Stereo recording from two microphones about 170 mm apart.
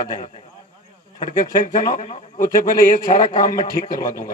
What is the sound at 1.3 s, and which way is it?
Speech, 50° left (ahead or behind).